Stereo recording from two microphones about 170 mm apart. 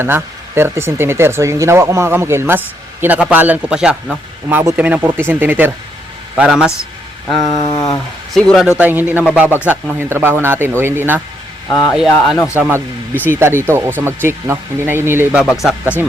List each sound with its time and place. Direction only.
0.0 s a man's voice: 15° right (ahead or behind)
7.4 s a sound: 20° left (ahead or behind)
8.3 s a man's voice: centre (ahead or behind)
8.8 s a man's voice: 10° right (ahead or behind)
11.7 s a sound: 20° left (ahead or behind)
12.1 s a man's voice: centre (ahead or behind)
12.5 s a man's voice: 10° right (ahead or behind)